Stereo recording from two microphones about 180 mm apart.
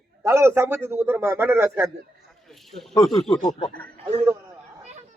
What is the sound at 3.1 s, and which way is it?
Speech, centre (ahead or behind).